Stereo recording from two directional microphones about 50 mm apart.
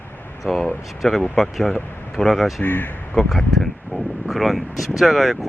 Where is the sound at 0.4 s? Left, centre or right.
Centre.